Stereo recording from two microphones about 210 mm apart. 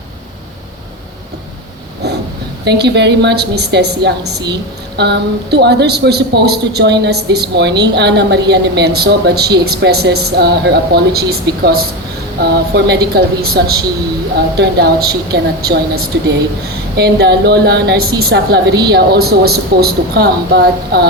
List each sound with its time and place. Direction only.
2.6 s a woman's voice: 55° right (ahead or behind)